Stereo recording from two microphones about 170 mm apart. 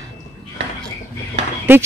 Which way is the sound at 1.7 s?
15° right (ahead or behind).